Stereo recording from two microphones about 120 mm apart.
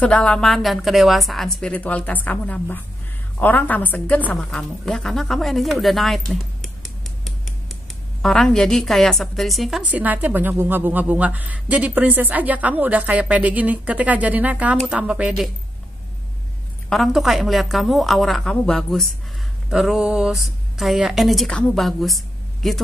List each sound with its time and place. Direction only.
0.0 s a woman's voice: 10° left (ahead or behind)
9.8 s a woman's voice: 15° right (ahead or behind)
16.9 s a woman's voice: centre (ahead or behind)